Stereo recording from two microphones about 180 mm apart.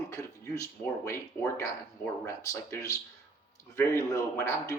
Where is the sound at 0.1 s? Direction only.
15° left (ahead or behind).